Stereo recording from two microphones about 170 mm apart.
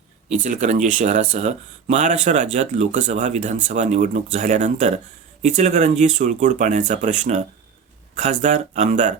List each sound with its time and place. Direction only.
0.3 s speech: 45° right (ahead or behind)